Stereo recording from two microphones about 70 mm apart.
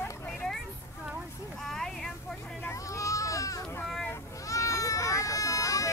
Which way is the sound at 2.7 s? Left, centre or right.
Left.